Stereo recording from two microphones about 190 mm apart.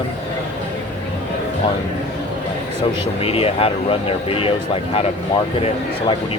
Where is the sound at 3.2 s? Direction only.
30° left (ahead or behind).